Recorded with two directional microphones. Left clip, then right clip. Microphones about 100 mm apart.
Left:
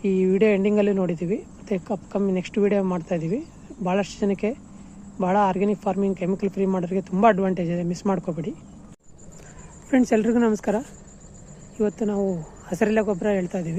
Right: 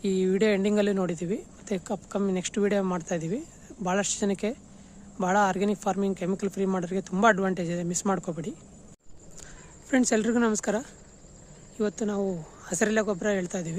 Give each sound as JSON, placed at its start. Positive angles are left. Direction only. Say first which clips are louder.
{"t": 0.0, "sound": "speech", "louder": "left 5 dB", "side_deg": -15}
{"t": 2.4, "sound": "speech", "louder": "left 5 dB", "side_deg": -20}
{"t": 9.9, "sound": "speech", "louder": "left 4 dB", "side_deg": -5}
{"t": 11.8, "sound": "speech", "louder": "left 5 dB", "side_deg": -15}